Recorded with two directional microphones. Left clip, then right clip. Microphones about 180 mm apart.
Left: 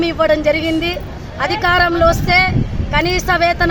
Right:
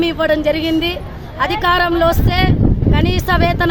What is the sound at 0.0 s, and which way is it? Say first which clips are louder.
Speech: left 1 dB; 10° right (ahead or behind).